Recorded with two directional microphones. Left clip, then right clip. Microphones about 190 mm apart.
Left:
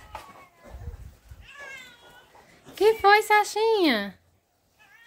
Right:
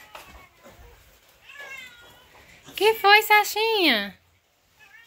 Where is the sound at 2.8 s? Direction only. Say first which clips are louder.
Right 1 dB; 20° left (ahead or behind).